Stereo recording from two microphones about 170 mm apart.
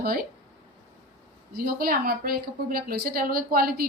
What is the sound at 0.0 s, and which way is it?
Speech, 60° right (ahead or behind).